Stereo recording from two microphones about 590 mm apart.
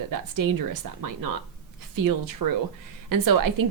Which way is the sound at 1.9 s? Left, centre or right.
Right.